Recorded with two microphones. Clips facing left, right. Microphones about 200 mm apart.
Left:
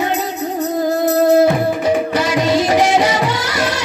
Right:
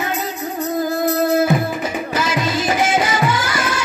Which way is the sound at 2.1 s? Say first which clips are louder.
Left 5 dB; 65° left (ahead or behind).